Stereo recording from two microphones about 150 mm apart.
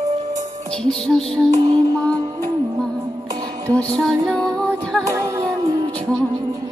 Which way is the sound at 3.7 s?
5° left (ahead or behind).